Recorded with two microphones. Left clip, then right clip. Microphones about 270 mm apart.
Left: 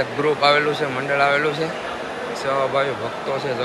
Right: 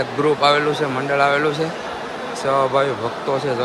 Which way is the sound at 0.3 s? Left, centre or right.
Centre.